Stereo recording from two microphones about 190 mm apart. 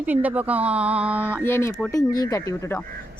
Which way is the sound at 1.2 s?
10° left (ahead or behind).